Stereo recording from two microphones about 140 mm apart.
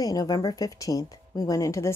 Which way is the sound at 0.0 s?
25° left (ahead or behind).